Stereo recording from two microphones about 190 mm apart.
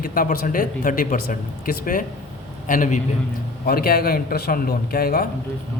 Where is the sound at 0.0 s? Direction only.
45° left (ahead or behind).